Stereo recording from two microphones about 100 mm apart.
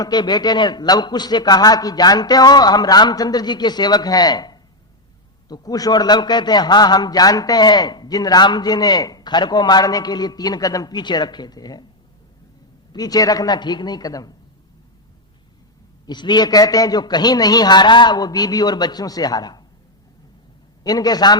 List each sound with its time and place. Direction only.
0.0 s a man's voice: 45° left (ahead or behind)
12.9 s a woman's voice: 40° left (ahead or behind)
16.0 s a man's voice: 45° left (ahead or behind)
20.8 s a woman's voice: 40° left (ahead or behind)